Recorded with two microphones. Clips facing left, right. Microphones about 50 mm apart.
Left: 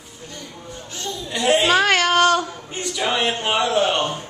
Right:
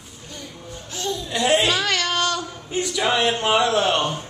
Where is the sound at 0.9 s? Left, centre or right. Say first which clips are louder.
Right 2 dB; centre.